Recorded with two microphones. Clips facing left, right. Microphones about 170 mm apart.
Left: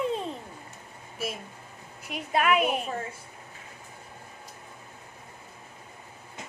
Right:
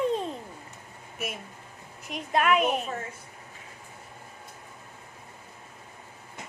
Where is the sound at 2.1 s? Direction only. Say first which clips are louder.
Right 1 dB; 5° left (ahead or behind).